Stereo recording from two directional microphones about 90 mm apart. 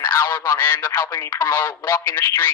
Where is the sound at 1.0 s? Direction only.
35° left (ahead or behind).